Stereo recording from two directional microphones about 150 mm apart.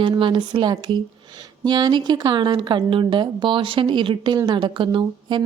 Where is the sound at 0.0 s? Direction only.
35° right (ahead or behind).